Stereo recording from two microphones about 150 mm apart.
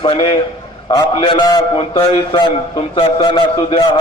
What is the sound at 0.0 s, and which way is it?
A man's voice, 35° left (ahead or behind).